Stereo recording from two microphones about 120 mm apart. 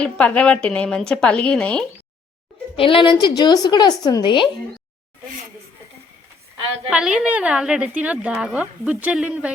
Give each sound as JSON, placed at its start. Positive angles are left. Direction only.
{"t": 0.0, "sound": "a woman's voice", "side_deg": 10}
{"t": 2.7, "sound": "a woman's voice", "side_deg": 50}
{"t": 6.9, "sound": "a woman's voice", "side_deg": -5}